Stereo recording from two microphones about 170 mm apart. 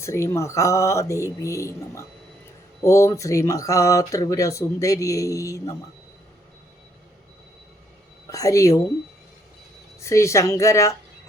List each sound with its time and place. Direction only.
0.0 s speech: 15° left (ahead or behind)
8.3 s speech: 20° left (ahead or behind)
10.0 s speech: 15° left (ahead or behind)